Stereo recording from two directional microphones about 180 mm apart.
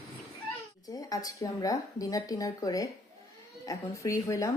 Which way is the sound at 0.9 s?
20° left (ahead or behind).